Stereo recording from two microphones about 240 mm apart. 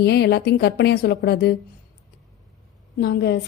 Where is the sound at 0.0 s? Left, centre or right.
Left.